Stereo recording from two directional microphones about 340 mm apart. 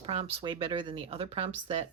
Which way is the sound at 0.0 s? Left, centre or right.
Centre.